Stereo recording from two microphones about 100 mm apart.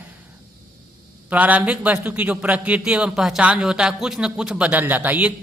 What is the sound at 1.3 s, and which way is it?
A man's voice, 15° right (ahead or behind).